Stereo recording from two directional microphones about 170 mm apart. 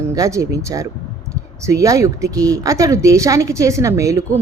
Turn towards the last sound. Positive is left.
turn(degrees=-20)  # may be behind; listen again after turning